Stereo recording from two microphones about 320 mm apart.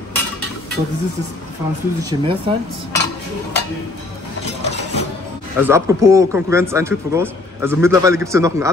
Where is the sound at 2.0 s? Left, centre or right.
Centre.